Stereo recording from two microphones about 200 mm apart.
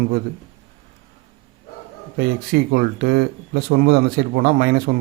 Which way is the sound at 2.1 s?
50° right (ahead or behind).